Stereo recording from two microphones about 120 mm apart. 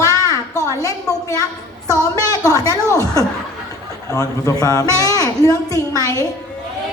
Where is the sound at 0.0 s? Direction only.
30° left (ahead or behind).